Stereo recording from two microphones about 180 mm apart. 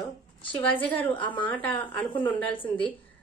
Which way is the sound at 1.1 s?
25° left (ahead or behind).